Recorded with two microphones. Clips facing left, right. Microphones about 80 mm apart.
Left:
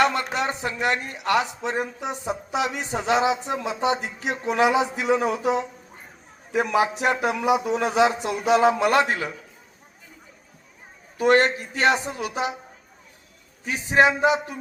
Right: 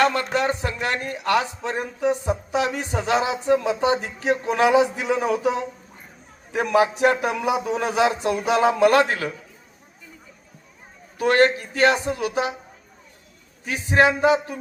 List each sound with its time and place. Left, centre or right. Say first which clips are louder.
0.0 s speech: right 2 dB; centre
11.2 s speech: right 1 dB; left
13.7 s speech: even; left